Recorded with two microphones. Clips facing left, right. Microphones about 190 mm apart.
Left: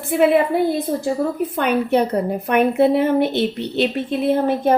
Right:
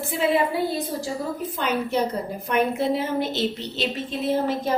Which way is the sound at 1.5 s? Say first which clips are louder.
Left 5 dB; 60° left (ahead or behind).